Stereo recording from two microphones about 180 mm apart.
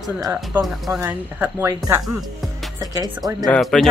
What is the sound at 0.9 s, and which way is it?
Speech, 15° right (ahead or behind).